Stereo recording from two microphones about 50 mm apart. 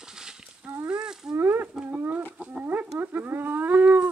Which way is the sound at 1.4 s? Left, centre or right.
Right.